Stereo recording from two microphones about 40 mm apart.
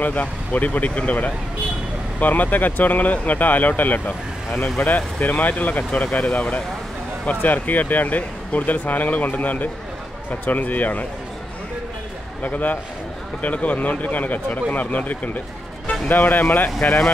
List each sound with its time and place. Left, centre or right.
0.0 s speech: left
12.4 s speech: left